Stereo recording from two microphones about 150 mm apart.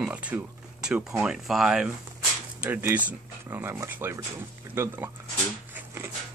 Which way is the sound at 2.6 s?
15° right (ahead or behind).